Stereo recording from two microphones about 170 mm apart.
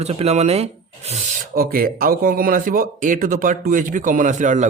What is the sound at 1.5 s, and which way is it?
Speech, 60° right (ahead or behind).